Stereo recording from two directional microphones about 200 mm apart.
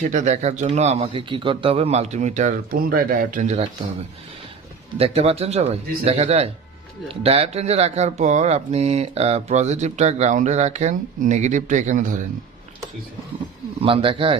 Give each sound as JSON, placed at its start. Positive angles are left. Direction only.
{"t": 0.0, "sound": "speech", "side_deg": -35}
{"t": 4.9, "sound": "speech", "side_deg": -30}
{"t": 13.8, "sound": "speech", "side_deg": -25}